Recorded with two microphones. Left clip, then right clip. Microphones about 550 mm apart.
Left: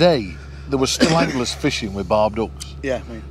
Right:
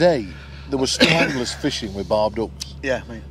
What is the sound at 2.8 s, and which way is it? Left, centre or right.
Speech, right.